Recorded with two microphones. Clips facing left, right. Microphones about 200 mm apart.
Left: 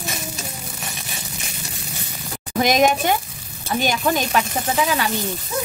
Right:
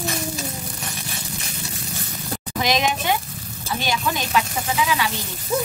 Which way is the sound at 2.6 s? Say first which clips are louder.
Left 5 dB; 50° left (ahead or behind).